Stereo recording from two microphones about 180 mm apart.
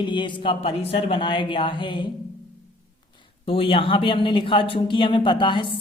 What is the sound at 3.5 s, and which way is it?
Speech, 30° left (ahead or behind).